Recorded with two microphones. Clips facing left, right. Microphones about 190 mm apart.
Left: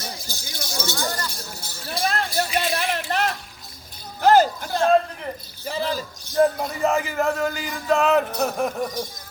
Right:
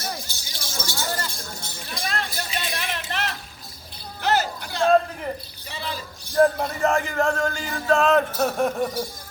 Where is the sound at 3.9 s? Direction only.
45° left (ahead or behind).